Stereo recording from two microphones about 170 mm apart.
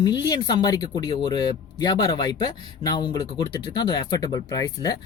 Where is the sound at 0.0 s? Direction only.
25° left (ahead or behind).